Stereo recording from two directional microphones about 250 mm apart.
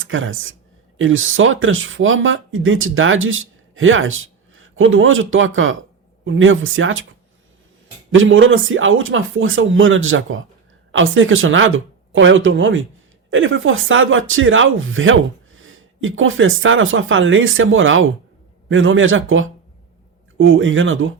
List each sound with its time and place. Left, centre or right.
0.0 s speech: right
8.1 s speech: right